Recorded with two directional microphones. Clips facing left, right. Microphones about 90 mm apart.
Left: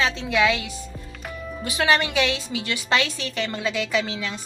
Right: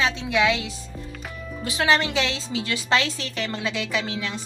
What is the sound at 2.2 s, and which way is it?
Speech, 25° right (ahead or behind).